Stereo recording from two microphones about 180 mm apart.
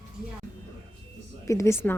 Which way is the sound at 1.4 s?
15° left (ahead or behind).